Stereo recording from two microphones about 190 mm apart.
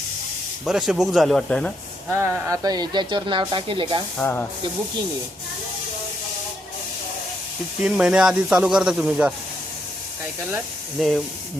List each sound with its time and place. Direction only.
0.6 s speech: 5° right (ahead or behind)
2.1 s speech: 15° right (ahead or behind)
4.2 s speech: 10° left (ahead or behind)
7.8 s speech: 5° right (ahead or behind)
11.0 s speech: centre (ahead or behind)